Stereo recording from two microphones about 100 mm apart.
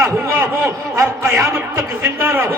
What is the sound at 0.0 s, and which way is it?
A man's voice, 30° right (ahead or behind).